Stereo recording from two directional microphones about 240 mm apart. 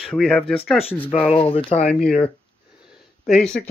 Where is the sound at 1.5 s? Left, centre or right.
Left.